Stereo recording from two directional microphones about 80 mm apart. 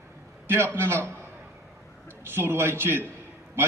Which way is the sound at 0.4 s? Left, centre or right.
Right.